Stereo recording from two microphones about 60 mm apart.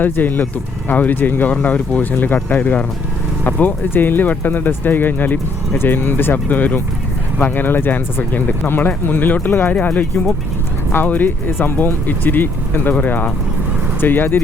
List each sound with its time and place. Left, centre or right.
0.0 s speech: left